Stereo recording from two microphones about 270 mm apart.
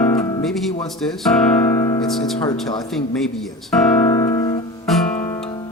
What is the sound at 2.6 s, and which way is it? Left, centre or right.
Speech, centre.